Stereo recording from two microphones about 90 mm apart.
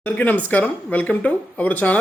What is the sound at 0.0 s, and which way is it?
Speech, 20° left (ahead or behind).